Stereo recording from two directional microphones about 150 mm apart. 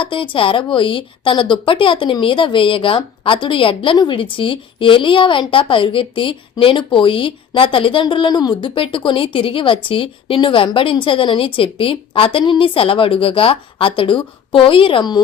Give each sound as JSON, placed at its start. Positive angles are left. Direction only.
{"t": 0.0, "sound": "a woman's voice", "side_deg": 35}